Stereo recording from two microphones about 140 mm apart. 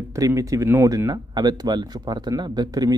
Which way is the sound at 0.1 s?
25° right (ahead or behind).